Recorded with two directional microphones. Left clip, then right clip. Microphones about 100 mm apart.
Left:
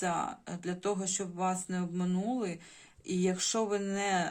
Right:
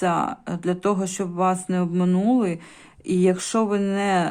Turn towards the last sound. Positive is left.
turn(degrees=-35)  # may be behind; listen again after turning